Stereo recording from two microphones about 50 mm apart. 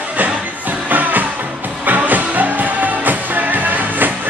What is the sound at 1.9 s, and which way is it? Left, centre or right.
Music, right.